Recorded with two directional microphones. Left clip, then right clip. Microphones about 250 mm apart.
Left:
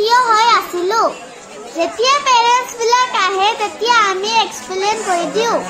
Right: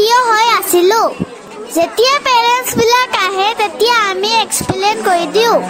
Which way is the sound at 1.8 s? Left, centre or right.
Right.